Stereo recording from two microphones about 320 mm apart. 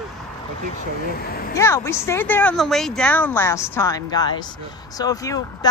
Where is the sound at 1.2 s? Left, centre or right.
Left.